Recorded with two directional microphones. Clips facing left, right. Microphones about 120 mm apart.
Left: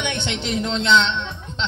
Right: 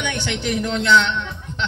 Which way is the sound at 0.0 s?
20° left (ahead or behind).